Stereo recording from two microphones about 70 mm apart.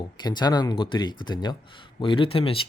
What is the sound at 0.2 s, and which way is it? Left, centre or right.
Speech, left.